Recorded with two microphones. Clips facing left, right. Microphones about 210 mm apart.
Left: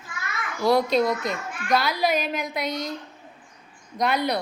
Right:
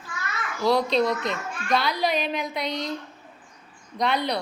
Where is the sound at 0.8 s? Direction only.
45° left (ahead or behind).